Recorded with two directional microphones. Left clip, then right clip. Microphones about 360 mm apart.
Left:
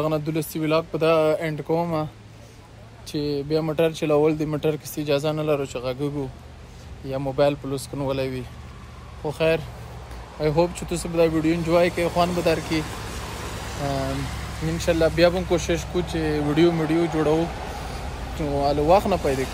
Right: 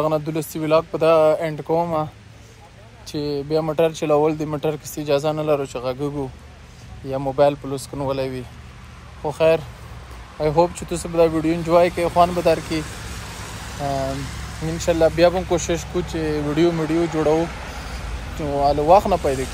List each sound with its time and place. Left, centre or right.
0.0 s speech: centre
3.1 s speech: centre
12.8 s vehicle: left
14.1 s speech: centre
14.8 s speech: centre
18.6 s speech: centre